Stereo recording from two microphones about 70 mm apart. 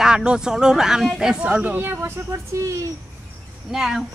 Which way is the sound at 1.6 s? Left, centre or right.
Right.